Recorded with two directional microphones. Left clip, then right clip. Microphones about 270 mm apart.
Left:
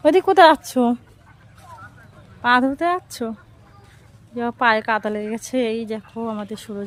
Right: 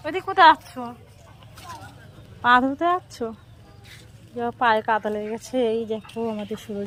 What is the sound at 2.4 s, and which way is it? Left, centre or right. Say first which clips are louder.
Speech: left 1 dB; centre.